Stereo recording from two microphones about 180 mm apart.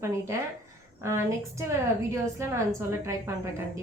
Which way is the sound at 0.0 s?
15° right (ahead or behind).